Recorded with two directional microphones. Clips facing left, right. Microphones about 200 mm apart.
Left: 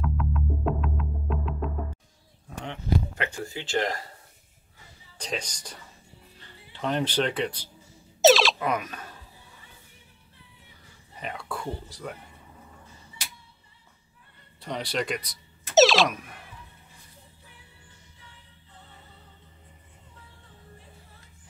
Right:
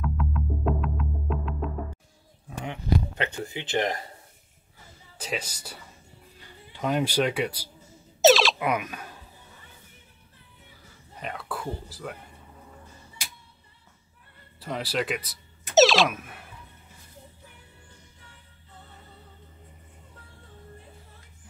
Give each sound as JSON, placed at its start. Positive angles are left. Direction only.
{"t": 0.0, "sound": "music", "side_deg": 0}
{"t": 3.2, "sound": "speech", "side_deg": -20}
{"t": 5.1, "sound": "speech", "side_deg": -5}
{"t": 8.2, "sound": "a sound", "side_deg": 0}
{"t": 8.5, "sound": "speech", "side_deg": -10}
{"t": 11.1, "sound": "speech", "side_deg": 0}
{"t": 14.6, "sound": "speech", "side_deg": -5}